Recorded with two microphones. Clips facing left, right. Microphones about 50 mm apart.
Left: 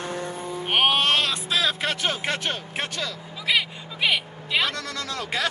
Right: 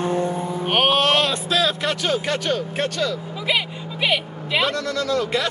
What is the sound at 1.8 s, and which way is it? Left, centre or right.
Speech, centre.